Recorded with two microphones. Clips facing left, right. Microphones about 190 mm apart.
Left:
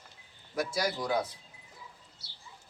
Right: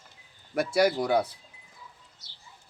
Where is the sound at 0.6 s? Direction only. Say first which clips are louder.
Right 8 dB; 60° right (ahead or behind).